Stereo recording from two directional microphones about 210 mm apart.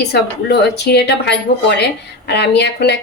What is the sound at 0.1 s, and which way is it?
A woman's voice, 50° left (ahead or behind).